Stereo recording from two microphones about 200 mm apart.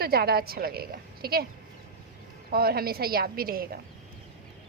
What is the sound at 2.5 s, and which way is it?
A woman's voice, 50° right (ahead or behind).